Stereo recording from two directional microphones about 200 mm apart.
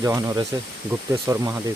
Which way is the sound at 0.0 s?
15° right (ahead or behind).